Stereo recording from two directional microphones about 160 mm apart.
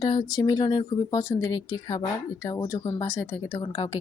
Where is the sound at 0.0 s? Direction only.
25° left (ahead or behind).